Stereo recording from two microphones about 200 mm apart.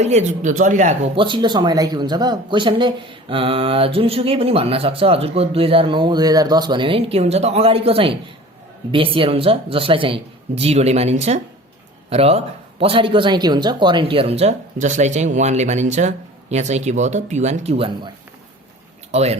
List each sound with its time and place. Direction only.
0.0 s speech: 35° right (ahead or behind)
19.1 s speech: 30° right (ahead or behind)